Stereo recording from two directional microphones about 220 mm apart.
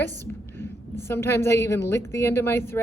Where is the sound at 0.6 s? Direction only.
10° left (ahead or behind).